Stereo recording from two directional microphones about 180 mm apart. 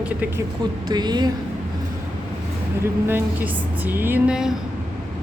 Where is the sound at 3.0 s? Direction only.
10° right (ahead or behind).